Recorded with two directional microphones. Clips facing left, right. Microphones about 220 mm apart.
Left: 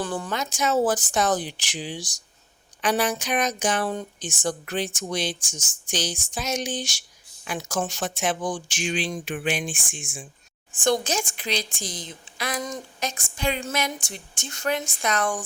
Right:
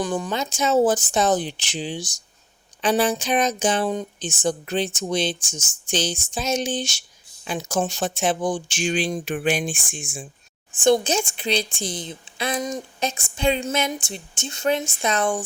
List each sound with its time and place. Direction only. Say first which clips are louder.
0.0 s a woman's voice: right 4 dB; 15° right (ahead or behind)
8.9 s speech: right 4 dB; 40° right (ahead or behind)
10.8 s a woman's voice: right 5 dB; 25° right (ahead or behind)